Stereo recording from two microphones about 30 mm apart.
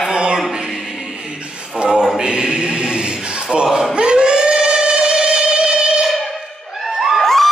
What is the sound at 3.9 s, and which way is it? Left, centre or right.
Singing, right.